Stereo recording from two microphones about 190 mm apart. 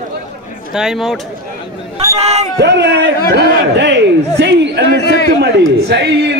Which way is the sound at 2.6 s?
65° right (ahead or behind).